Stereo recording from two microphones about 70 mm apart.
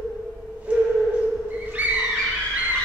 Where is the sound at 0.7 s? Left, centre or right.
Centre.